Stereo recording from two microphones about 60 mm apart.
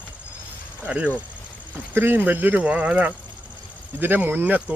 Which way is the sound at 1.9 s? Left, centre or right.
Right.